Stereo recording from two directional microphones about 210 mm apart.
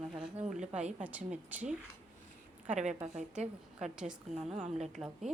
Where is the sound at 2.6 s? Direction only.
35° right (ahead or behind).